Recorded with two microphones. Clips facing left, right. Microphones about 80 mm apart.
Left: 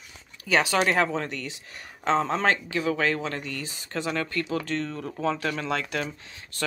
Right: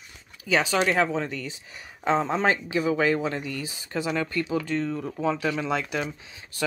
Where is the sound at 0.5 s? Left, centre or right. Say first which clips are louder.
Even; centre.